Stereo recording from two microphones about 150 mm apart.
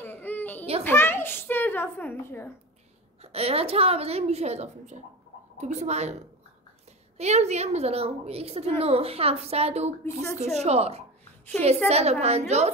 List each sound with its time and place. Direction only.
0.0 s children playing: 10° left (ahead or behind)
0.8 s a woman's voice: 15° left (ahead or behind)
3.2 s a woman's voice: 40° right (ahead or behind)
7.2 s a woman's voice: 45° right (ahead or behind)